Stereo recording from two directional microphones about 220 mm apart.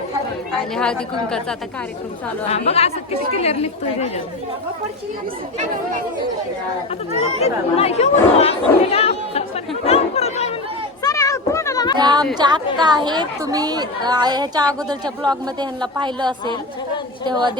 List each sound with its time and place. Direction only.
0.8 s speech: 5° left (ahead or behind)
2.5 s speech: 30° left (ahead or behind)
7.4 s speech: 30° left (ahead or behind)
9.8 s chatter: 30° left (ahead or behind)
11.0 s a sound: 15° left (ahead or behind)
11.9 s a woman's voice: 20° right (ahead or behind)